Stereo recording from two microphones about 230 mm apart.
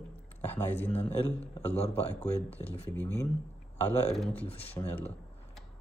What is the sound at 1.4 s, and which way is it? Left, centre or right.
Speech, left.